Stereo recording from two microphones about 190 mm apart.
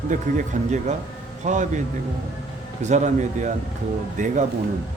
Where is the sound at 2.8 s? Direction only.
40° right (ahead or behind).